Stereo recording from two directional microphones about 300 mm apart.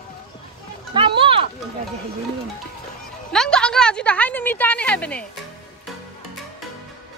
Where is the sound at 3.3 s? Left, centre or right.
Centre.